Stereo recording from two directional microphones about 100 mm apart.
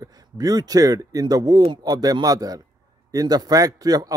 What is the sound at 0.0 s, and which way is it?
A man's voice, 40° right (ahead or behind).